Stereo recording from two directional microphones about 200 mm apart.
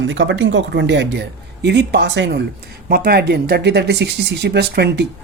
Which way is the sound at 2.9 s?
50° right (ahead or behind).